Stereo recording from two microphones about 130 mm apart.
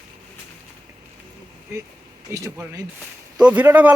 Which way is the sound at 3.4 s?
10° right (ahead or behind).